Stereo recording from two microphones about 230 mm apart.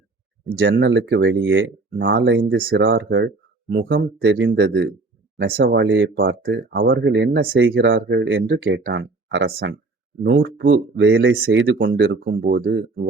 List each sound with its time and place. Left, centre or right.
0.6 s speech: right
2.6 s speech: right
2.8 s speech: right
12.5 s speech: right